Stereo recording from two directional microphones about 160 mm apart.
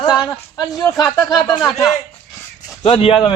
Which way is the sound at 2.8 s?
35° left (ahead or behind).